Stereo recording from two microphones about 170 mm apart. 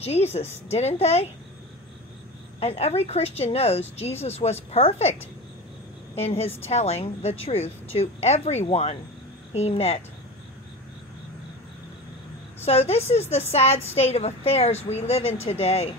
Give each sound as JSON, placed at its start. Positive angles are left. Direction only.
{"t": 0.0, "sound": "a woman's voice", "side_deg": 40}
{"t": 2.6, "sound": "a woman's voice", "side_deg": 40}
{"t": 6.1, "sound": "a woman's voice", "side_deg": 40}
{"t": 12.6, "sound": "a woman's voice", "side_deg": 40}